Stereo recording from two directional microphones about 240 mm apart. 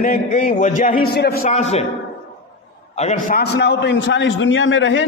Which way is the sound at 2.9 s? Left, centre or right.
Left.